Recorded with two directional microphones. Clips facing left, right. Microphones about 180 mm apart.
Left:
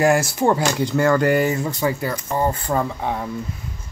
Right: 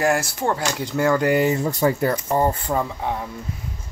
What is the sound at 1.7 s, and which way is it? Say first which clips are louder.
Speech: right 2 dB; 40° right (ahead or behind).